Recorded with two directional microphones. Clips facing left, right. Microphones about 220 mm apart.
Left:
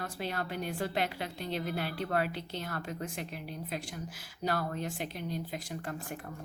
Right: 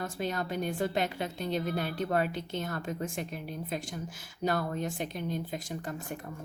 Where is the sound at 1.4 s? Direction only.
45° right (ahead or behind).